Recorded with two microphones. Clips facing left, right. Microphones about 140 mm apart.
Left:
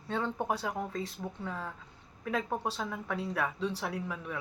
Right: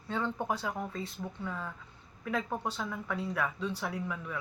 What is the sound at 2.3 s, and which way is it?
Speech, 30° left (ahead or behind).